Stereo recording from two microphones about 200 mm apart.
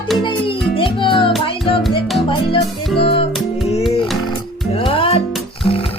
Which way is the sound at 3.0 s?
30° left (ahead or behind).